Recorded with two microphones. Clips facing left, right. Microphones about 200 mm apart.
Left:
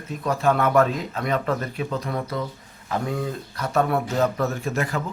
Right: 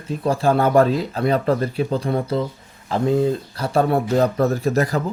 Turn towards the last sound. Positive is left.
turn(degrees=-35)  # may be behind; listen again after turning